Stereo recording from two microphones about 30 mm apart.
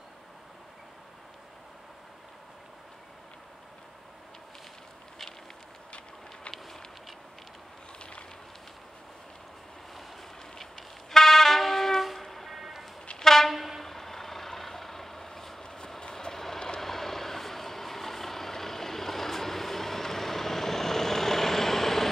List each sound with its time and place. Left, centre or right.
8.0 s fire: left
10.6 s train: centre
13.2 s train: centre
13.5 s train: centre
13.8 s vehicle: centre
15.6 s train: left
16.0 s vehicle: left
16.8 s vehicle: centre